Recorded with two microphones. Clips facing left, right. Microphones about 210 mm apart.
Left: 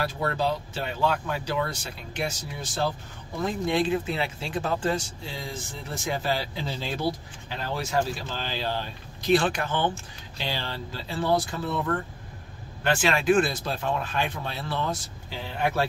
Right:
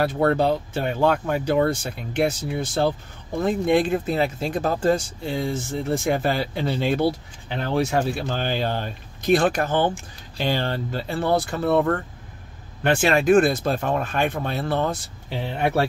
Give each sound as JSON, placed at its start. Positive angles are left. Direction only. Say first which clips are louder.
{"t": 0.0, "sound": "speech", "louder": "right 7 dB", "side_deg": -55}
{"t": 5.2, "sound": "speech", "louder": "right 10 dB", "side_deg": -55}
{"t": 12.8, "sound": "speech", "louder": "right 4 dB", "side_deg": -45}